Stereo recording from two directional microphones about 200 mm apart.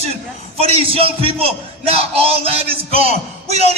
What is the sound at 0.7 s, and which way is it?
A man's voice, 30° right (ahead or behind).